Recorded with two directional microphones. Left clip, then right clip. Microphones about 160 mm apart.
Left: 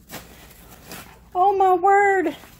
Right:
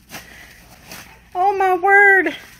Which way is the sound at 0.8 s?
10° left (ahead or behind).